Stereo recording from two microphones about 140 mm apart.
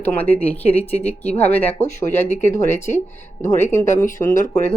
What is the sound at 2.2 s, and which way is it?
Speech, 55° left (ahead or behind).